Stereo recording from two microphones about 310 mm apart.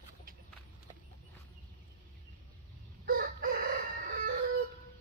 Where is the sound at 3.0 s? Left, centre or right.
Right.